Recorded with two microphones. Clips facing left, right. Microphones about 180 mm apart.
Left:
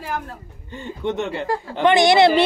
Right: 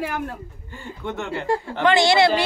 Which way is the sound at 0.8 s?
20° left (ahead or behind).